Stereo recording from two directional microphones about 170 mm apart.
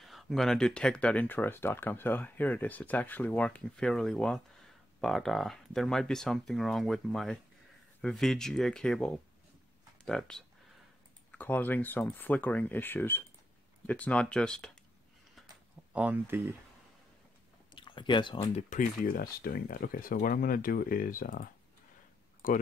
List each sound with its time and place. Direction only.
0.0 s speech: centre (ahead or behind)
15.9 s speech: 10° right (ahead or behind)
17.7 s speech: 30° left (ahead or behind)
18.7 s speech: 55° left (ahead or behind)